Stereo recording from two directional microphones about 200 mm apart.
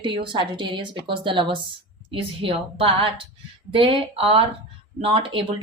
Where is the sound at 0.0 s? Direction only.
25° right (ahead or behind).